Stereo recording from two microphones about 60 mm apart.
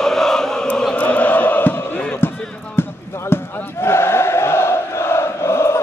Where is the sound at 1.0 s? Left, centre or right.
Left.